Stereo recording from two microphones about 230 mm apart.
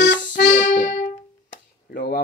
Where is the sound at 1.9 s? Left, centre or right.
Left.